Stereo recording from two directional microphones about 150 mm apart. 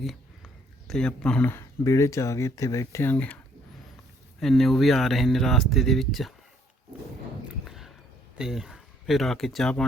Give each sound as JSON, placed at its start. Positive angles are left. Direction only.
{"t": 0.0, "sound": "speech", "side_deg": 0}
{"t": 4.4, "sound": "speech", "side_deg": 0}
{"t": 7.6, "sound": "a sound", "side_deg": 0}
{"t": 8.4, "sound": "speech", "side_deg": -5}